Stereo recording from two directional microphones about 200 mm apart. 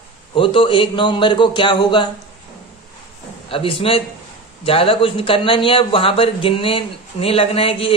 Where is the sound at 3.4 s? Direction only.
25° left (ahead or behind).